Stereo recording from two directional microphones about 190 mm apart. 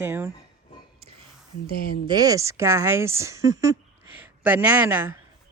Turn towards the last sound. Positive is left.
turn(degrees=-10)  # may be behind; listen again after turning